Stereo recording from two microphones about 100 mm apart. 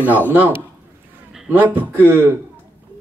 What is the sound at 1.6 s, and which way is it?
Speech, 20° right (ahead or behind).